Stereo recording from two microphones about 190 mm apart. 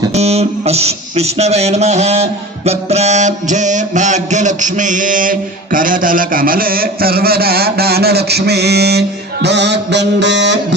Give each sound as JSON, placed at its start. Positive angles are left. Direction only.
{"t": 0.1, "sound": "speech", "side_deg": -35}